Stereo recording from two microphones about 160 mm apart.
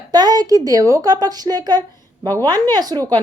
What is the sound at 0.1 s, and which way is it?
Speech, 25° right (ahead or behind).